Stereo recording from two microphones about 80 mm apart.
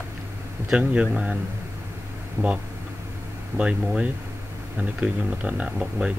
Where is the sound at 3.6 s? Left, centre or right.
Centre.